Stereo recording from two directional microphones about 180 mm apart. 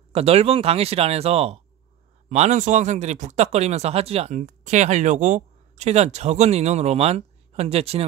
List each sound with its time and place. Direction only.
0.1 s speech: 35° right (ahead or behind)